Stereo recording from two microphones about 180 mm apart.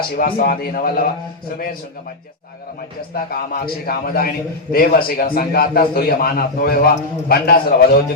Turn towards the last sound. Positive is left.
turn(degrees=55)  # may be behind; listen again after turning